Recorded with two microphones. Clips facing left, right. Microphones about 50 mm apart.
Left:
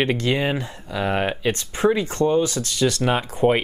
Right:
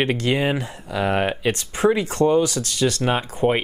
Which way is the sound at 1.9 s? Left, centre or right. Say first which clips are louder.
Right 2 dB; right.